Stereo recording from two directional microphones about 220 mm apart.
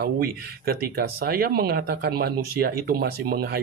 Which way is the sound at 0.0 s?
45° right (ahead or behind).